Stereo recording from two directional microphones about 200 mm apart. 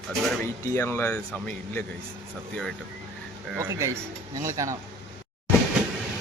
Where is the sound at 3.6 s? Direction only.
15° right (ahead or behind).